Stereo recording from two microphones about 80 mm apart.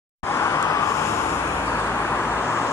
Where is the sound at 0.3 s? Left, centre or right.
Left.